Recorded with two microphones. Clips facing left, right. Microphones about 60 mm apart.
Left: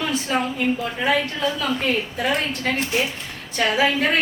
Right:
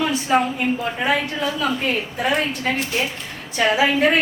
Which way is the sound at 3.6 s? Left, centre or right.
Centre.